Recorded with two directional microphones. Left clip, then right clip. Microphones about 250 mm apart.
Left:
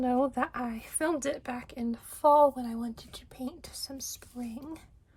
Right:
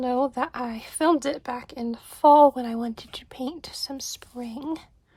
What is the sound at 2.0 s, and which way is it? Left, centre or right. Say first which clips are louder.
Speech: right 7 dB; centre.